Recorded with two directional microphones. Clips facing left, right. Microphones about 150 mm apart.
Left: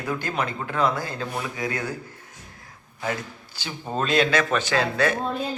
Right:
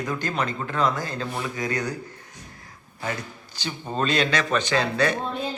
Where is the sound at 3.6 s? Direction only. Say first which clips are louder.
Right 1 dB; 5° left (ahead or behind).